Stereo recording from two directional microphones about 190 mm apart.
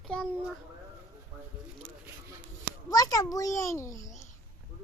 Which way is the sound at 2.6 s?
20° left (ahead or behind).